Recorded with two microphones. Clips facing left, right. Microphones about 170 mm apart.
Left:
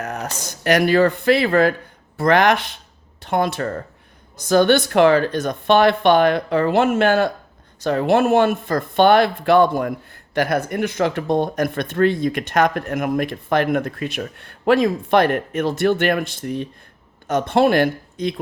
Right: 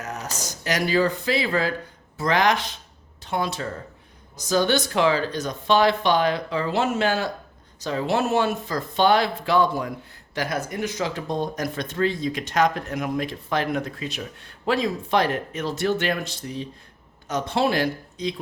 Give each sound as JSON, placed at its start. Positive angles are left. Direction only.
{"t": 0.0, "sound": "speech", "side_deg": 60}